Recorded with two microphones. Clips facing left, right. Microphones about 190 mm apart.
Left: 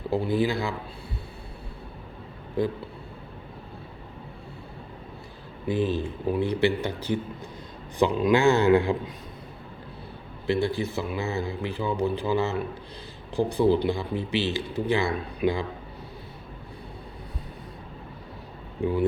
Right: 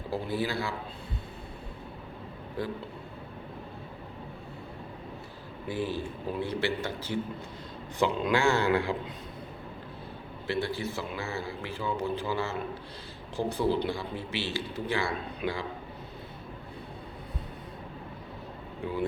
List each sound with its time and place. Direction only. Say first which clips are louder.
0.1 s speech: left 6 dB; 15° left (ahead or behind)
5.6 s a man's voice: left 6 dB; 20° left (ahead or behind)
10.4 s speech: left 6 dB; 15° left (ahead or behind)